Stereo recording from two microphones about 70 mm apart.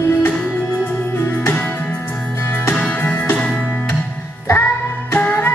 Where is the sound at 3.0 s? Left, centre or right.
Left.